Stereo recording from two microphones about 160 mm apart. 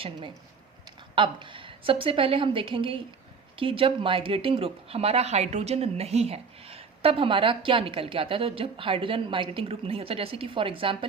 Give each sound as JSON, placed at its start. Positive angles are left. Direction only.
{"t": 1.1, "sound": "speech", "side_deg": -30}